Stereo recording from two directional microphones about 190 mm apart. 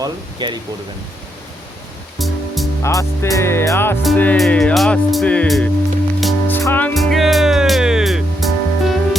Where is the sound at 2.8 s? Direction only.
15° left (ahead or behind).